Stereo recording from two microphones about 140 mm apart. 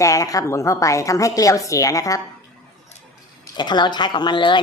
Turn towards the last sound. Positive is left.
turn(degrees=35)  # may be behind; listen again after turning